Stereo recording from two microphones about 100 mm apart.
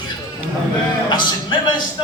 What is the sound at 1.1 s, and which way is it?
Speech, 45° left (ahead or behind).